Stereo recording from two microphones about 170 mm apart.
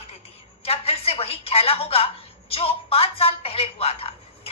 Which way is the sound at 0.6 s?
35° left (ahead or behind).